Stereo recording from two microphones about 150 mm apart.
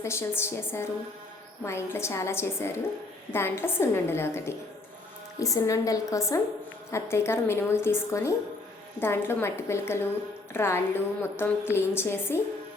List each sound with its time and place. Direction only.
0.0 s a woman's voice: 20° left (ahead or behind)